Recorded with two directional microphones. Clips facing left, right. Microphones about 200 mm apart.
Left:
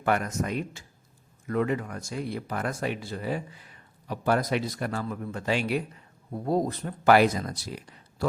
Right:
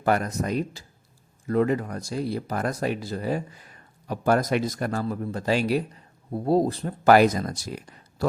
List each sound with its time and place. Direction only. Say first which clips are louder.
0.0 s speech: right 3 dB; 35° right (ahead or behind)